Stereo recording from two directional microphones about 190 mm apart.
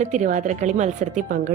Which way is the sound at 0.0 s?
40° right (ahead or behind).